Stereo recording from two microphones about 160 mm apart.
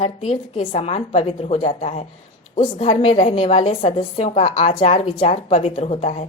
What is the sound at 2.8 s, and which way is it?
A woman's voice, 35° left (ahead or behind).